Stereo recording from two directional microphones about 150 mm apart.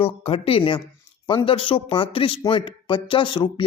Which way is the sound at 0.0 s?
40° left (ahead or behind).